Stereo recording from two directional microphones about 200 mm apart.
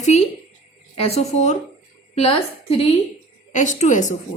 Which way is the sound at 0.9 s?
30° left (ahead or behind).